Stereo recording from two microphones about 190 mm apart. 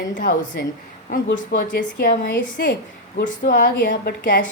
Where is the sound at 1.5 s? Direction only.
50° left (ahead or behind).